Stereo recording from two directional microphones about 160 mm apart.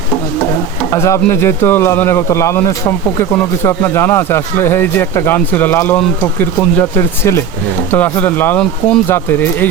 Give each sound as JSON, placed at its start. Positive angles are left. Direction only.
{"t": 0.9, "sound": "speech", "side_deg": 15}